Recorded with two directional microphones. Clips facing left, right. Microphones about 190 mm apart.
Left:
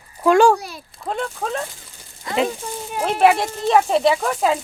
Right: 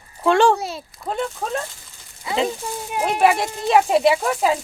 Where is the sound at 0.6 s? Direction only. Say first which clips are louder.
Right 6 dB; 25° right (ahead or behind).